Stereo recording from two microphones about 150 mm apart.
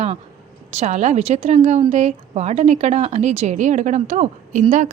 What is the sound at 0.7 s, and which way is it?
Speech, 50° right (ahead or behind).